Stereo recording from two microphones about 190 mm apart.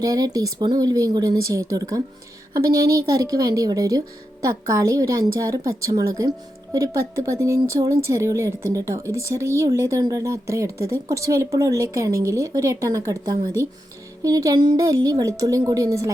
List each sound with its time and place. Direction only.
0.0 s speech: 20° right (ahead or behind)